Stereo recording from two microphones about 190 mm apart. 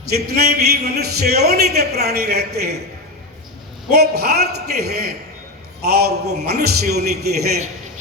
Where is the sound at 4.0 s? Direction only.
55° right (ahead or behind).